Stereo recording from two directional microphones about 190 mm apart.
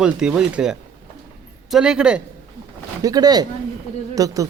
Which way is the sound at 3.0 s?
20° right (ahead or behind).